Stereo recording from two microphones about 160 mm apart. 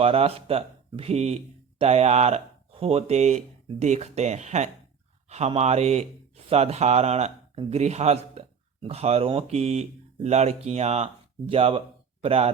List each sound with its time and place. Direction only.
0.0 s speech: 35° right (ahead or behind)